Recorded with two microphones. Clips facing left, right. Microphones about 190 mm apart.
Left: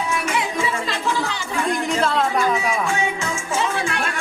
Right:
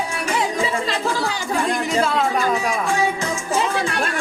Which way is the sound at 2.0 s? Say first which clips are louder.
Right 2 dB; 10° right (ahead or behind).